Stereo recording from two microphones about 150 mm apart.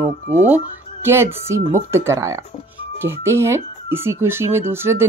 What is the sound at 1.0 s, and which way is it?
Speech, 15° right (ahead or behind).